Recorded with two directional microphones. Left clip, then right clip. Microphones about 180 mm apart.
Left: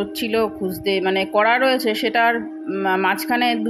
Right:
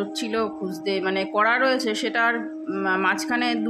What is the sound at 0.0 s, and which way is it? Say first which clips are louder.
Speech: left 5 dB; 20° left (ahead or behind).